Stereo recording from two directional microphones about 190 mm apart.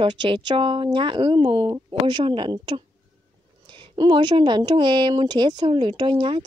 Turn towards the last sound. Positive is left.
turn(degrees=-25)  # may be behind; listen again after turning